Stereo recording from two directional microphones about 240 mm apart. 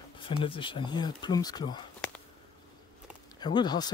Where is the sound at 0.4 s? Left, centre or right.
Left.